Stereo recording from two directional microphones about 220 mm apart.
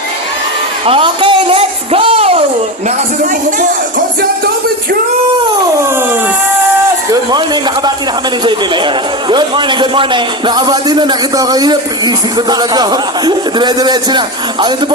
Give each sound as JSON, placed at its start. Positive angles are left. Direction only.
{"t": 0.9, "sound": "a man's voice", "side_deg": -25}
{"t": 7.1, "sound": "a man's voice", "side_deg": -20}